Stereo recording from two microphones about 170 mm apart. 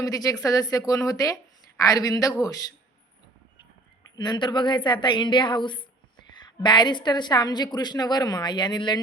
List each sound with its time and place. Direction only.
0.0 s a woman's voice: 20° left (ahead or behind)
4.1 s a woman's voice: 25° left (ahead or behind)